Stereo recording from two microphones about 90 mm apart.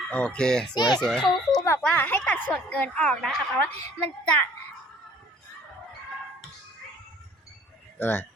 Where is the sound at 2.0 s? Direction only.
20° left (ahead or behind).